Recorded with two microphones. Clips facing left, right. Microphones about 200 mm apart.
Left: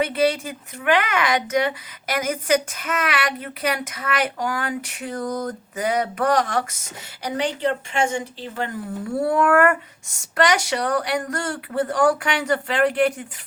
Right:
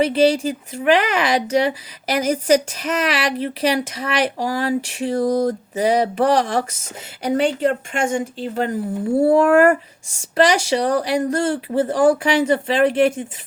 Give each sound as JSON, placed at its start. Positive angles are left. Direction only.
{"t": 0.0, "sound": "speech", "side_deg": -30}
{"t": 7.3, "sound": "speech", "side_deg": -45}
{"t": 9.2, "sound": "speech", "side_deg": -25}